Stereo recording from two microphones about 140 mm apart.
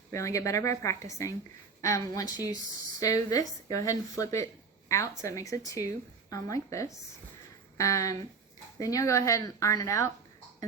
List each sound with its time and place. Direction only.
0.1 s a woman's voice: 20° left (ahead or behind)